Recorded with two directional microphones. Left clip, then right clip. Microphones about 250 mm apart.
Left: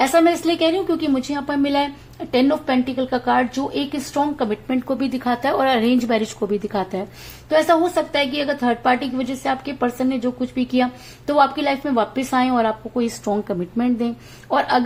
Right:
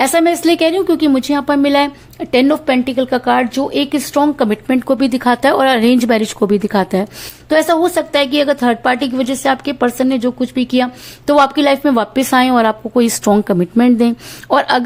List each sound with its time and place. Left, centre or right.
0.0 s a woman's voice: right